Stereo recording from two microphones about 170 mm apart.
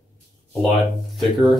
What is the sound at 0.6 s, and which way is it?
Speech, centre (ahead or behind).